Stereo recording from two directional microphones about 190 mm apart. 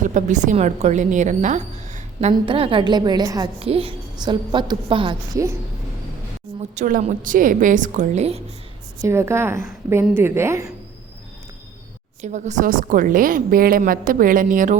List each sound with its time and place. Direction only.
0.0 s a woman's voice: 40° right (ahead or behind)
2.3 s a woman's voice: 25° right (ahead or behind)
6.7 s a woman's voice: 40° right (ahead or behind)
9.0 s a woman's voice: 15° right (ahead or behind)
12.2 s a woman's voice: 40° right (ahead or behind)